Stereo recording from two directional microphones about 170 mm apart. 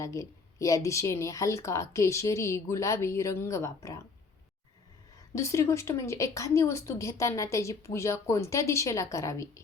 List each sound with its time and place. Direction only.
0.0 s a woman's voice: 20° left (ahead or behind)
5.3 s a woman's voice: 15° left (ahead or behind)